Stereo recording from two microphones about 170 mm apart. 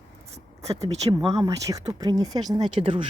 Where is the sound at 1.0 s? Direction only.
20° right (ahead or behind).